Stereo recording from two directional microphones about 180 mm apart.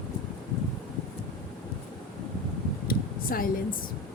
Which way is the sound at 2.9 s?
55° left (ahead or behind).